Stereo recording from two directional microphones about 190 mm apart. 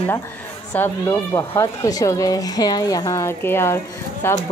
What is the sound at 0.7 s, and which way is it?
Speech, 15° left (ahead or behind).